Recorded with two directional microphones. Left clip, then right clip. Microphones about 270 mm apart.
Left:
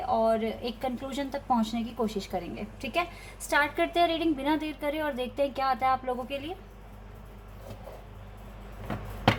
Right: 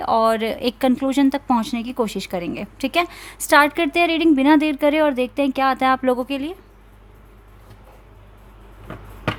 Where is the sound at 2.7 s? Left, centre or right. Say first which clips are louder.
Right 9 dB; right.